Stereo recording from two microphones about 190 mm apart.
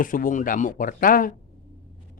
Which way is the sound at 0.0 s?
45° left (ahead or behind).